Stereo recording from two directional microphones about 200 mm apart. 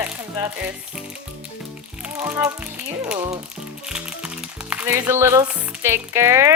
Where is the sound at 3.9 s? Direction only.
5° right (ahead or behind).